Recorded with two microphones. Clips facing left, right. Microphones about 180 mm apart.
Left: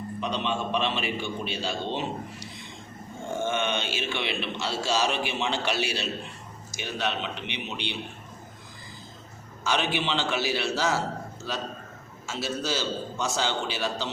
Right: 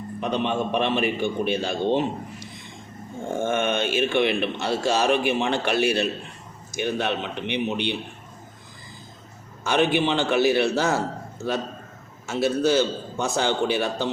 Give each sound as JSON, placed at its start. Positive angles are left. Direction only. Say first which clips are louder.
{"t": 0.2, "sound": "a man's voice", "louder": "right 5 dB", "side_deg": -55}
{"t": 9.6, "sound": "a man's voice", "louder": "right 6 dB", "side_deg": -55}